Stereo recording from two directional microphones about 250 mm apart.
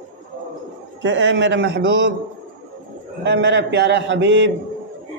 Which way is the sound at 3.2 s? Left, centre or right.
Right.